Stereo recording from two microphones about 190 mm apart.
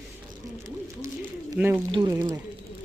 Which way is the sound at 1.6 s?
5° right (ahead or behind).